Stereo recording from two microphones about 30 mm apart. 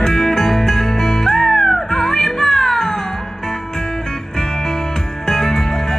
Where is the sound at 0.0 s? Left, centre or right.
Centre.